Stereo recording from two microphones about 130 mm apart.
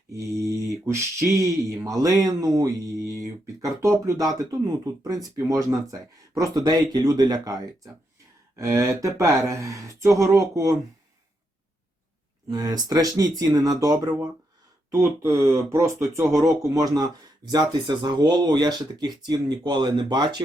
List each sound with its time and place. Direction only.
0.1 s speech: 25° right (ahead or behind)
12.5 s speech: 30° right (ahead or behind)